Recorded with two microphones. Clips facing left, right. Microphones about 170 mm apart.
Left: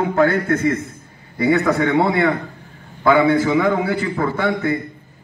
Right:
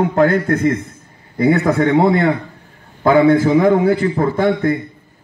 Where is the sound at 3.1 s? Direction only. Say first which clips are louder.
Right 3 dB; 40° right (ahead or behind).